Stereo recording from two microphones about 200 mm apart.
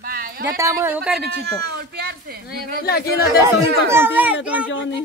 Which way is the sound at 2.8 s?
50° left (ahead or behind).